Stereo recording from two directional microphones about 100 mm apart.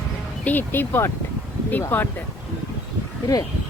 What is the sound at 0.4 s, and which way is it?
Speech, 20° left (ahead or behind).